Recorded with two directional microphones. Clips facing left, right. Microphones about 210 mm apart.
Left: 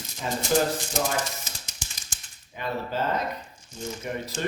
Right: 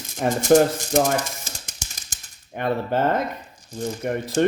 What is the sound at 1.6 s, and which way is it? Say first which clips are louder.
Typewriter: right 2 dB; 45° right (ahead or behind).